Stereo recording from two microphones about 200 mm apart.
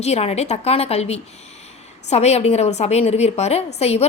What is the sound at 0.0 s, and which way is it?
A woman's voice, 30° left (ahead or behind).